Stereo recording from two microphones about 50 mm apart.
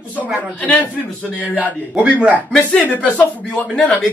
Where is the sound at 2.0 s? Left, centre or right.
Right.